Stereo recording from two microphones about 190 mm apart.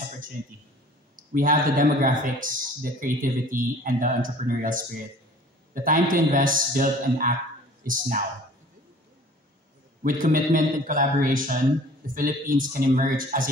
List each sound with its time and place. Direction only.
1.1 s speech: 45° right (ahead or behind)
10.0 s speech: 45° right (ahead or behind)